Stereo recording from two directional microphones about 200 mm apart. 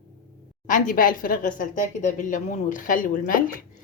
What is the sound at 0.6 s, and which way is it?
A woman's voice, 40° left (ahead or behind).